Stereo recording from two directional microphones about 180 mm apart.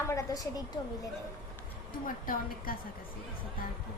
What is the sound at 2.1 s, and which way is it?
Speech, 50° left (ahead or behind).